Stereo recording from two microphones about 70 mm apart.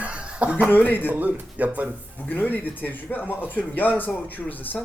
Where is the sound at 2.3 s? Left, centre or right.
Left.